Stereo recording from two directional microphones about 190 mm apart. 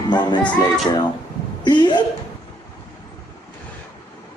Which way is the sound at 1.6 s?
25° left (ahead or behind).